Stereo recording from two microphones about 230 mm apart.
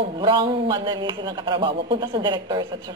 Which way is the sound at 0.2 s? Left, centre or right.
Centre.